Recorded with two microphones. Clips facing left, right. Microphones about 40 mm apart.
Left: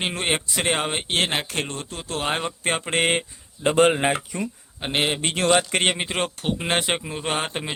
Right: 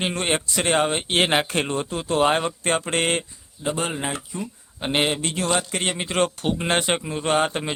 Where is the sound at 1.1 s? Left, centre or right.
Centre.